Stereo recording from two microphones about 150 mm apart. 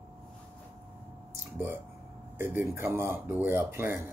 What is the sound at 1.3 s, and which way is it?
Speech, 15° right (ahead or behind).